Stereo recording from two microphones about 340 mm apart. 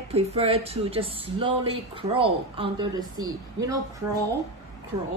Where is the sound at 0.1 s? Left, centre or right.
Centre.